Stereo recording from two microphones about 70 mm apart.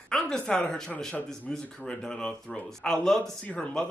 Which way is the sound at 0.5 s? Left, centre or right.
Centre.